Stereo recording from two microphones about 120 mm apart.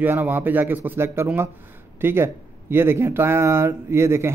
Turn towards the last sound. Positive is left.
turn(degrees=-20)  # may be behind; listen again after turning